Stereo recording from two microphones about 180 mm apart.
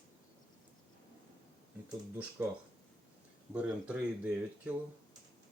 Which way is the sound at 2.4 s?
10° right (ahead or behind).